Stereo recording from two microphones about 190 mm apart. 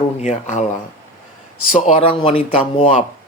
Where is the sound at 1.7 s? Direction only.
35° left (ahead or behind).